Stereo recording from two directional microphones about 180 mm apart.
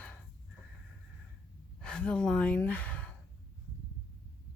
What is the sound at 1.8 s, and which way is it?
A woman's voice, 5° left (ahead or behind).